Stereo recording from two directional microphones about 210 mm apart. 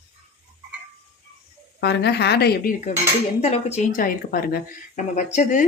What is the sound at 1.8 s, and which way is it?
Speech, 55° left (ahead or behind).